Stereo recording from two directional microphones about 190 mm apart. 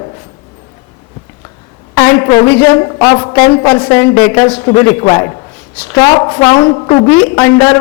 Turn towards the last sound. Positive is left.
turn(degrees=15)  # may be behind; listen again after turning